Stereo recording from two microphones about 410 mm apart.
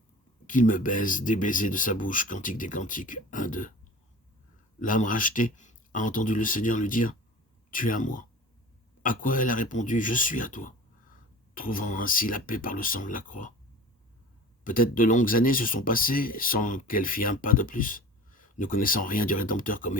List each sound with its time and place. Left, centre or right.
0.4 s speech: centre
4.8 s speech: centre
14.6 s speech: centre